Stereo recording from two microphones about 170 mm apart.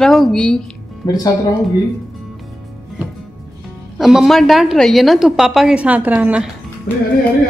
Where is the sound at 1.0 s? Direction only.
25° left (ahead or behind).